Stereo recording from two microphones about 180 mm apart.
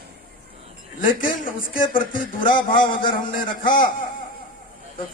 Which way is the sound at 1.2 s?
50° left (ahead or behind).